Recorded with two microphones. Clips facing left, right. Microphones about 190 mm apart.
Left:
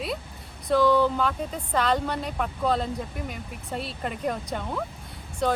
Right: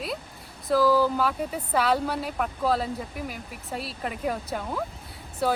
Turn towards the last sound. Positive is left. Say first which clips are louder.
# even
turn(degrees=-5)  # may be behind; listen again after turning